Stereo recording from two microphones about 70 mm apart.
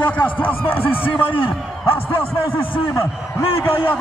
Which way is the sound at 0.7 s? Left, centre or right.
Left.